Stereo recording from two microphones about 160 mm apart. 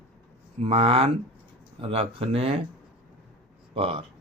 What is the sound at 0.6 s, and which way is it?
Speech, 40° right (ahead or behind).